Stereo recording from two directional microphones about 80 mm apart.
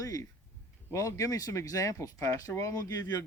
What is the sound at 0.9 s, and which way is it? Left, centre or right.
Speech, left.